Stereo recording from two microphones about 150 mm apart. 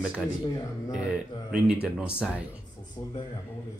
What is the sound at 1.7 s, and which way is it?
Speech, 5° right (ahead or behind).